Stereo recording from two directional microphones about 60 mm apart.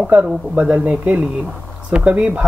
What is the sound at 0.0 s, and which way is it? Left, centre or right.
Speech, right.